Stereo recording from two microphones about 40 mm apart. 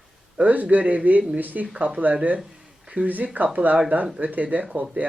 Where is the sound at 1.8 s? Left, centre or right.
Right.